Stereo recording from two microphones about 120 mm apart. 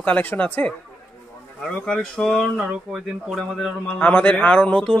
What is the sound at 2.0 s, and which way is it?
Speech, centre (ahead or behind).